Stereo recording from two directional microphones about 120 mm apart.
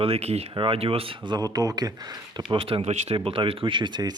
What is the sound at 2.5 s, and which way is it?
Speech, 50° right (ahead or behind).